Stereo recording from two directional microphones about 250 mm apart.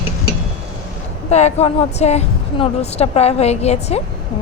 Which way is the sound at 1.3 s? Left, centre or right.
Left.